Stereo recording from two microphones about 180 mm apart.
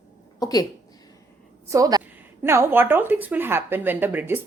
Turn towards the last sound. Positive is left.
turn(degrees=-10)  # may be behind; listen again after turning